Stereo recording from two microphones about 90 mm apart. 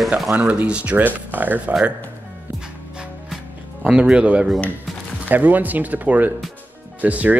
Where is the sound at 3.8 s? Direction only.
10° right (ahead or behind).